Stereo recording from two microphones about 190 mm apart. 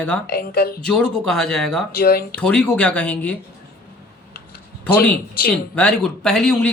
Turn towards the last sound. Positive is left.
turn(degrees=5)  # may be behind; listen again after turning